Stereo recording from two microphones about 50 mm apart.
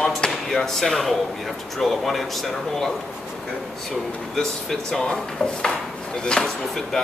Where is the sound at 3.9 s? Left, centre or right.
Centre.